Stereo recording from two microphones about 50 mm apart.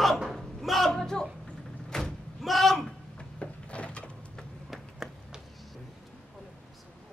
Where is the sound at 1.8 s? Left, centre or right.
Centre.